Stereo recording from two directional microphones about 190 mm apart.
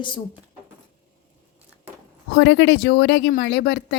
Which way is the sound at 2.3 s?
70° left (ahead or behind).